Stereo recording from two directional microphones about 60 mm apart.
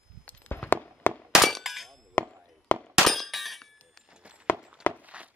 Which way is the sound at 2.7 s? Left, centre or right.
Left.